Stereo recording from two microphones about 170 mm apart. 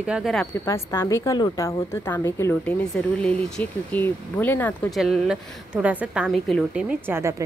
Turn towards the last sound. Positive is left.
turn(degrees=-15)  # may be behind; listen again after turning